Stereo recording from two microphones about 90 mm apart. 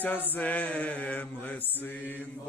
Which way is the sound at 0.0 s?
20° left (ahead or behind).